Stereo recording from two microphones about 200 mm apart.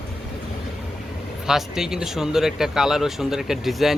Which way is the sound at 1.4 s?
5° right (ahead or behind).